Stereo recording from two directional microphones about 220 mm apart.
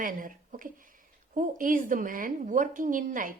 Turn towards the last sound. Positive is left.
turn(degrees=-35)  # may be behind; listen again after turning